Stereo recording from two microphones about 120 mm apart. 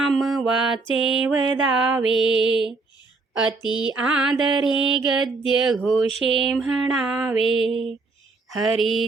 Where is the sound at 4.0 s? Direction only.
5° right (ahead or behind).